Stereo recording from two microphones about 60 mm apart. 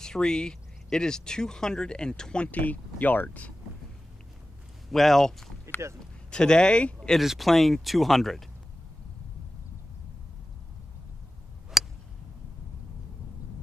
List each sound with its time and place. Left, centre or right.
0.0 s speech: centre; by 3.5 s left
4.9 s speech: centre
5.7 s a sound: right
6.3 s speech: centre
11.7 s tick: centre